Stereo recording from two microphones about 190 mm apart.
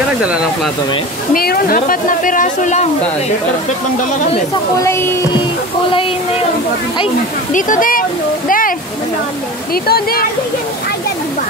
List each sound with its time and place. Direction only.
1.3 s a woman's voice: 50° left (ahead or behind)
4.8 s speech: 15° left (ahead or behind)
7.5 s a woman's voice: 45° left (ahead or behind)
8.5 s a sound: 45° left (ahead or behind)
9.8 s a woman's voice: 55° left (ahead or behind)